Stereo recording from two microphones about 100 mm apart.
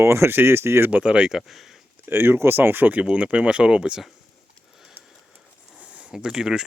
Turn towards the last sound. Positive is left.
turn(degrees=-5)  # may be behind; listen again after turning